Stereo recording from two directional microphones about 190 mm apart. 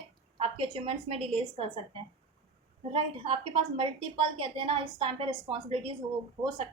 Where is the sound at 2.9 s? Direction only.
30° right (ahead or behind).